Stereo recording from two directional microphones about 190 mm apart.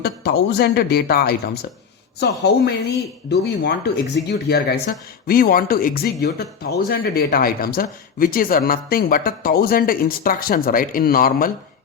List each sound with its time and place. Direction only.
0.0 s speech: 60° left (ahead or behind)